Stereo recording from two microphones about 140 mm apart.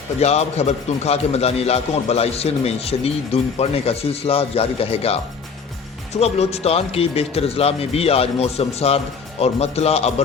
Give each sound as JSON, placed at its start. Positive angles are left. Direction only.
{"t": 0.2, "sound": "a man's voice", "side_deg": 50}
{"t": 6.1, "sound": "a man's voice", "side_deg": 50}